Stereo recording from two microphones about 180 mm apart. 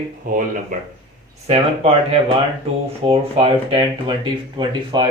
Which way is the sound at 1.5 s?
35° right (ahead or behind).